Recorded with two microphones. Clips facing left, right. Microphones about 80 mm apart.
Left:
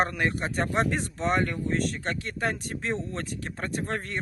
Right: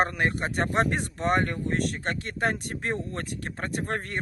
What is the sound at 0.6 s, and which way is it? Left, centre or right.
Speech, right.